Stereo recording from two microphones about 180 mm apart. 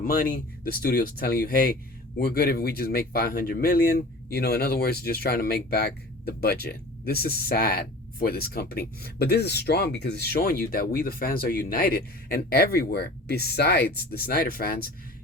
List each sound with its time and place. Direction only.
0.0 s speech: 55° left (ahead or behind)